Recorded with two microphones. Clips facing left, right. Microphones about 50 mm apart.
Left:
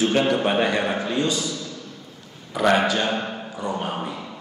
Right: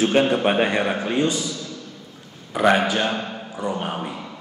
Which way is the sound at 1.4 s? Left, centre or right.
Left.